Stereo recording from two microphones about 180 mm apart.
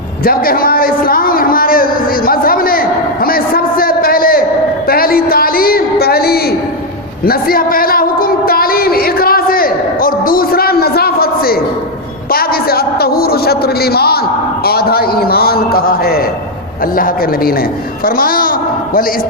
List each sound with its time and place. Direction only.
0.3 s a man's voice: 55° left (ahead or behind)
7.3 s a sound: 55° left (ahead or behind)
12.3 s a man's voice: 55° left (ahead or behind)
18.0 s a child's voice: 55° left (ahead or behind)